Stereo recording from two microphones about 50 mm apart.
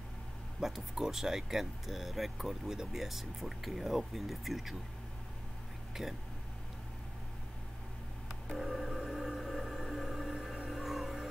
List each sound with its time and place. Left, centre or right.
0.6 s speech: centre
6.0 s speech: centre
8.7 s music: centre